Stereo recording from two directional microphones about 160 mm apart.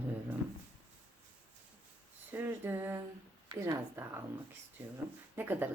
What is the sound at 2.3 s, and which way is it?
Speech, 15° right (ahead or behind).